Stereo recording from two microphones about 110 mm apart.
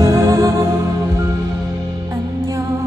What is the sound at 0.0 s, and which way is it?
Music, 30° right (ahead or behind).